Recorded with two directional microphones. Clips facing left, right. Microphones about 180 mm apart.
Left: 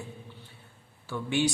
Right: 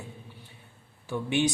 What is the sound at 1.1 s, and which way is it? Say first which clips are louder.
Speech: right 1 dB; 20° right (ahead or behind).